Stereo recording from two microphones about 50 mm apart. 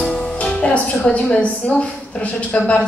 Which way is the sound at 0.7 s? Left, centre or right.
Left.